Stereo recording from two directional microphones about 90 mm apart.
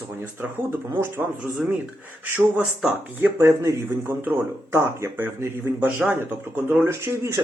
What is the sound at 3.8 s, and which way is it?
Speech, 20° right (ahead or behind).